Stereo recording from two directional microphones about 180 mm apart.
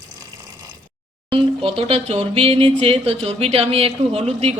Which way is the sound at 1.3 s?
30° right (ahead or behind).